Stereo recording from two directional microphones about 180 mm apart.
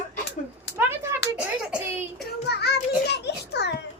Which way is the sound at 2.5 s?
65° left (ahead or behind).